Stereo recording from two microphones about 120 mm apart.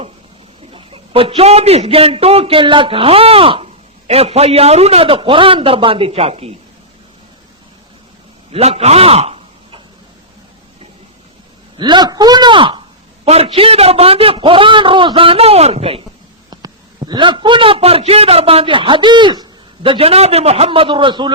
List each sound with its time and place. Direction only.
0.7 s a man's voice: 50° right (ahead or behind)
8.5 s a man's voice: 60° right (ahead or behind)
11.8 s a woman's voice: 35° right (ahead or behind)
13.2 s a man's voice: 60° right (ahead or behind)
16.5 s a man's voice: 35° right (ahead or behind)